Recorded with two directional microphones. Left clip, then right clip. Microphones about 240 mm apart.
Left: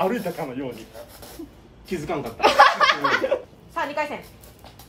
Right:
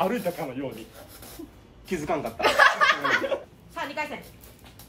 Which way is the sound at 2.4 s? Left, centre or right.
Left.